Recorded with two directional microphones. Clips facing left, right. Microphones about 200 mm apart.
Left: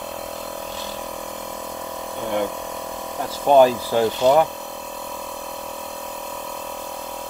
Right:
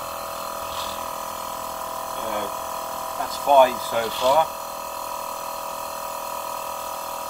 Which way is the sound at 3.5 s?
30° left (ahead or behind).